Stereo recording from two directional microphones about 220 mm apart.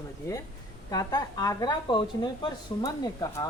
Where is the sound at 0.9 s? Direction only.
15° left (ahead or behind).